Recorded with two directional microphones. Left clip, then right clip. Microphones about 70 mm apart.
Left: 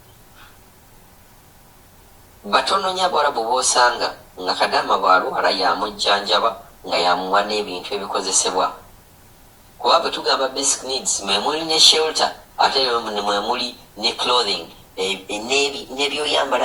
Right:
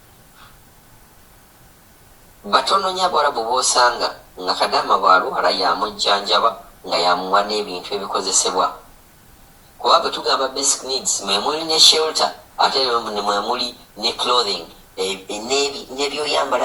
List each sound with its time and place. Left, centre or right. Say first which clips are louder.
2.4 s speech: right 1 dB; right
9.8 s speech: right 1 dB; right